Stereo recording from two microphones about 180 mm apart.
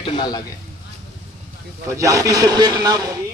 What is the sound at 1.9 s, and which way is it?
A man's voice, 20° right (ahead or behind).